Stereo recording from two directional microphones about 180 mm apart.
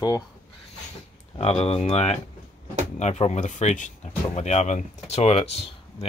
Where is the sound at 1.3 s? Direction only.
35° left (ahead or behind).